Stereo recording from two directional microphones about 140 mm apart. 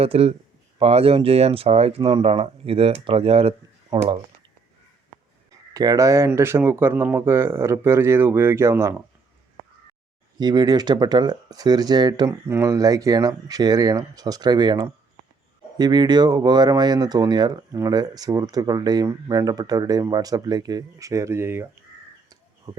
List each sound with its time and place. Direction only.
0.0 s speech: 45° right (ahead or behind)
3.9 s speech: 30° right (ahead or behind)
5.7 s speech: 25° right (ahead or behind)
10.3 s speech: 30° right (ahead or behind)
22.3 s crow: 30° right (ahead or behind)